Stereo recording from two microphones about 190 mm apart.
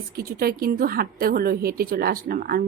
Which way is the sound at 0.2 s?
50° right (ahead or behind).